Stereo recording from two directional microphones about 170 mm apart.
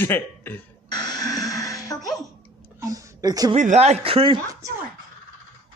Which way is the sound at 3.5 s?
40° right (ahead or behind).